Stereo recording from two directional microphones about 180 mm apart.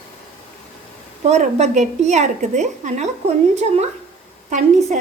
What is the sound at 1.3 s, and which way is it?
Speech, 40° right (ahead or behind).